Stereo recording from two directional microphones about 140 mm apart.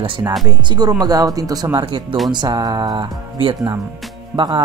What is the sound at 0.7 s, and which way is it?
Speech, 30° right (ahead or behind).